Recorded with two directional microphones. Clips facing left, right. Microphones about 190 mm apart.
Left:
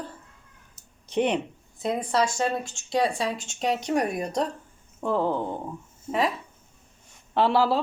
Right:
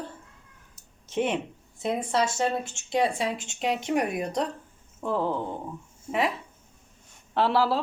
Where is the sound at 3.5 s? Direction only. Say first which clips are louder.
Left 2 dB; 40° left (ahead or behind).